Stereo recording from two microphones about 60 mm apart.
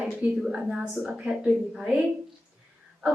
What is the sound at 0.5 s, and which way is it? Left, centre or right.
A woman's voice, centre.